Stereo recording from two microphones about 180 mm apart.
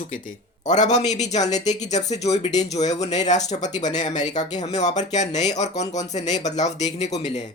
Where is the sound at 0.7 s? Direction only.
40° left (ahead or behind).